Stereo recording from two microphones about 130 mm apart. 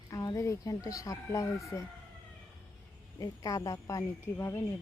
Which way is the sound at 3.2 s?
25° left (ahead or behind).